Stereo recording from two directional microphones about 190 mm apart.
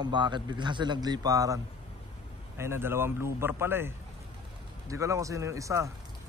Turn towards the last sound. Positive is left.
turn(degrees=-15)  # may be behind; listen again after turning